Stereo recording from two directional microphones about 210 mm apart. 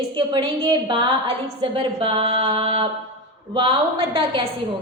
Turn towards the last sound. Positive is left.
turn(degrees=-25)  # may be behind; listen again after turning